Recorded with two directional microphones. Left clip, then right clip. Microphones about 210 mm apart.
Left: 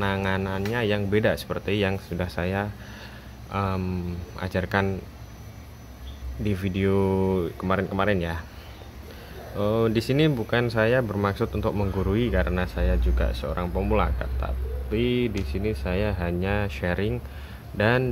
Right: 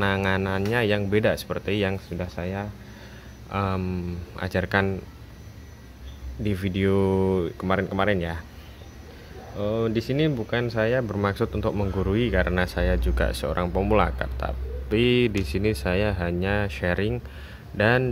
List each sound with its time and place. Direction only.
0.0 s speech: 15° right (ahead or behind); by 2.7 s 5° left (ahead or behind)
3.5 s speech: 10° right (ahead or behind)
6.4 s speech: 5° right (ahead or behind)
9.6 s speech: 5° left (ahead or behind)